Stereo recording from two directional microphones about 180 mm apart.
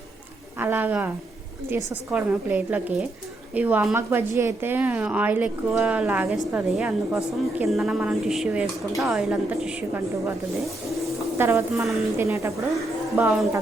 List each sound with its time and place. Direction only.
0.6 s a woman's voice: 10° right (ahead or behind)
11.3 s a woman's voice: 15° right (ahead or behind)
11.7 s a woman's voice: centre (ahead or behind)
12.1 s a woman's voice: 15° right (ahead or behind)
12.7 s a woman's voice: 5° right (ahead or behind)